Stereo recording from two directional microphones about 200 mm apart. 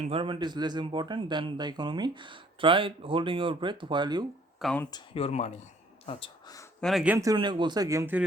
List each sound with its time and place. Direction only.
0.0 s speech: 25° right (ahead or behind)
4.6 s speech: 5° left (ahead or behind)
4.9 s speech: 25° left (ahead or behind)
6.8 s speech: 5° right (ahead or behind)